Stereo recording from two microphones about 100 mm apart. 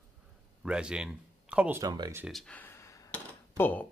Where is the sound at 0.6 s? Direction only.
10° right (ahead or behind).